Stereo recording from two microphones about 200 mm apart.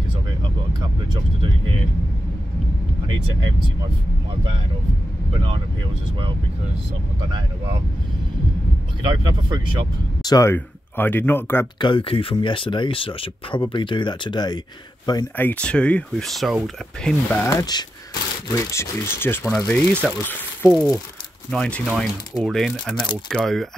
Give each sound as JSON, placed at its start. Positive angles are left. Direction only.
{"t": 1.1, "sound": "vehicle", "side_deg": -25}
{"t": 9.0, "sound": "speech", "side_deg": -20}
{"t": 10.2, "sound": "speech", "side_deg": 15}
{"t": 11.8, "sound": "speech", "side_deg": 25}
{"t": 15.3, "sound": "speech", "side_deg": 10}